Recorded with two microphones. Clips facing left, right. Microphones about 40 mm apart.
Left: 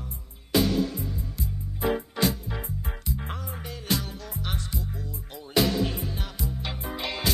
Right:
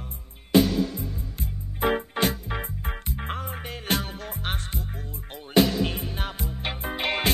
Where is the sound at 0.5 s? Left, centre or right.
Right.